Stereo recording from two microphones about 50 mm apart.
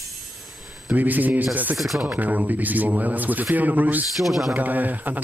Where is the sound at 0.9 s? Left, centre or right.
Right.